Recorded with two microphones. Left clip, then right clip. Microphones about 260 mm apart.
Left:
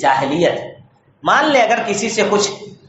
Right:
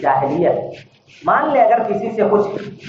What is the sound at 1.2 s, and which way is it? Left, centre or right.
A man's voice, left.